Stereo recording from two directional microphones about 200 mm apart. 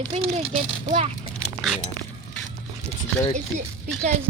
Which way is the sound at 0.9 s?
30° right (ahead or behind).